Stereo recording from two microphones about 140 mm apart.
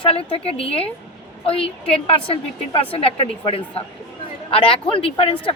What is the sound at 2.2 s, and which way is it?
Speech, 40° left (ahead or behind).